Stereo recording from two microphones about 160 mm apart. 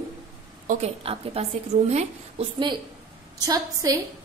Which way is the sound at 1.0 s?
40° right (ahead or behind).